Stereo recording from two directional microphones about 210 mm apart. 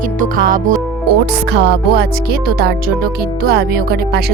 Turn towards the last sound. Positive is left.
turn(degrees=-50)  # may be behind; listen again after turning